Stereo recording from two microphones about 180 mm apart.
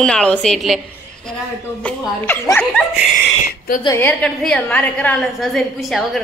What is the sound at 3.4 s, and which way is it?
Speech, 50° left (ahead or behind).